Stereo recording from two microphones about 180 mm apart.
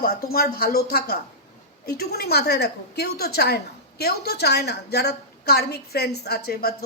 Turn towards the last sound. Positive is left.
turn(degrees=60)  # may be behind; listen again after turning